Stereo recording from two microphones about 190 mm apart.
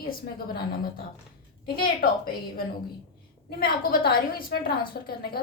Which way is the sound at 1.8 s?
50° left (ahead or behind).